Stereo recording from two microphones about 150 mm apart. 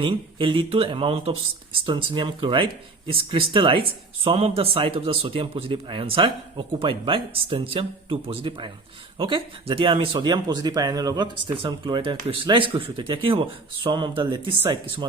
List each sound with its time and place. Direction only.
0.0 s speech: 35° right (ahead or behind)